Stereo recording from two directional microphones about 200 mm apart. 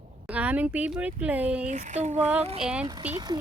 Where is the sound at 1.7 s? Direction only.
35° right (ahead or behind).